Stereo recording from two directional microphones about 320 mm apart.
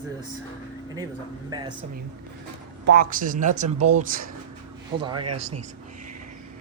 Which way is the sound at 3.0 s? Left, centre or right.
Right.